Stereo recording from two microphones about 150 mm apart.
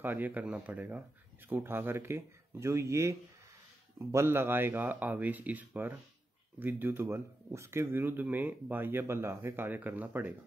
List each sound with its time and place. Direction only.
0.0 s speech: 10° right (ahead or behind)